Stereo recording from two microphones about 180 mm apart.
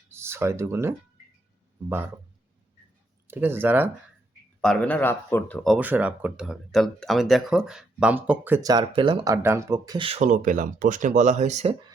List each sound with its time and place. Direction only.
0.1 s speech: 15° right (ahead or behind)
3.2 s speech: 10° right (ahead or behind)
4.6 s speech: 5° left (ahead or behind)
5.7 s speech: 10° right (ahead or behind)
10.1 s speech: 40° right (ahead or behind)